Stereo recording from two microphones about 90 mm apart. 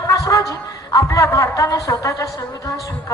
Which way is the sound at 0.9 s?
35° left (ahead or behind).